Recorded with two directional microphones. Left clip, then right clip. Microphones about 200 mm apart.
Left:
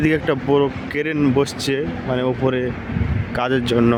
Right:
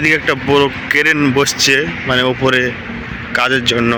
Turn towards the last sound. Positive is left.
turn(degrees=25)  # may be behind; listen again after turning